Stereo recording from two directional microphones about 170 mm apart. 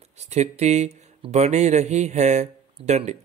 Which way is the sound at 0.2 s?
40° right (ahead or behind).